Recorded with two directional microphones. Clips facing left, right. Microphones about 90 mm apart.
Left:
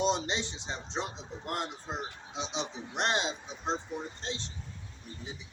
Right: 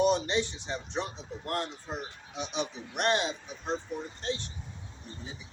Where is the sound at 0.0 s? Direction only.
20° left (ahead or behind).